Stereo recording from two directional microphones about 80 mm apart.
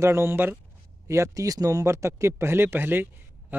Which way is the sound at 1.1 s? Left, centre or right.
Right.